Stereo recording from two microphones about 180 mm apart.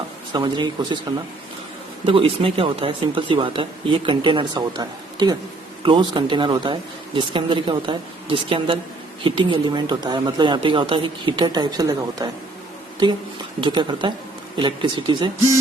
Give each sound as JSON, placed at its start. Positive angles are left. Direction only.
{"t": 0.3, "sound": "speech", "side_deg": -25}
{"t": 2.0, "sound": "speech", "side_deg": -30}
{"t": 13.6, "sound": "speech", "side_deg": -25}